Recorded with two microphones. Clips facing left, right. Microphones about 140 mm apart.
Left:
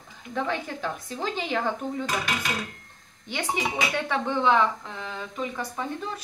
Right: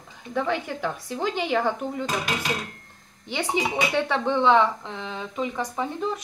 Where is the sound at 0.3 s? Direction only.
10° right (ahead or behind).